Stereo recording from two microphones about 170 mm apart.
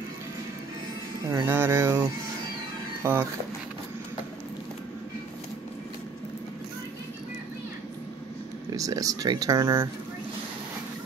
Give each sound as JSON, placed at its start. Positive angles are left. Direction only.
{"t": 1.2, "sound": "a sound", "side_deg": -20}
{"t": 3.0, "sound": "speech", "side_deg": -15}
{"t": 8.7, "sound": "speech", "side_deg": -20}